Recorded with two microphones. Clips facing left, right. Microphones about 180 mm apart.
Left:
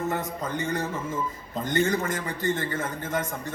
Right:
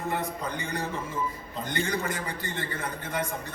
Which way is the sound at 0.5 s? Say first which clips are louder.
Left 4 dB; 45° left (ahead or behind).